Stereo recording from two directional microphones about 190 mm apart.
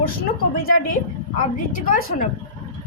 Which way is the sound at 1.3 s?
45° left (ahead or behind).